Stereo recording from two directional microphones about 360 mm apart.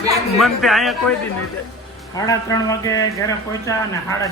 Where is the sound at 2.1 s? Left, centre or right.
Centre.